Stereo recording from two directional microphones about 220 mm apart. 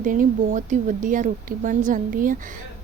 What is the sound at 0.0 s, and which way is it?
A woman's voice, 40° right (ahead or behind).